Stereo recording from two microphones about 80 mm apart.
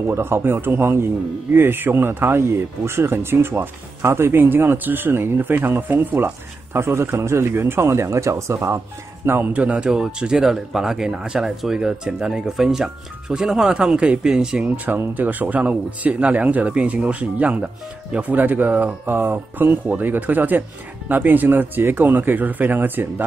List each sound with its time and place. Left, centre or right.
0.0 s speech: right
9.5 s speech: centre
14.9 s speech: right